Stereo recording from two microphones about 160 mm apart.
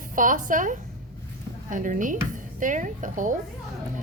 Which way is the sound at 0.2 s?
55° right (ahead or behind).